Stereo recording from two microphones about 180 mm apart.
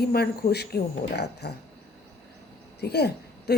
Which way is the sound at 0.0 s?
60° left (ahead or behind).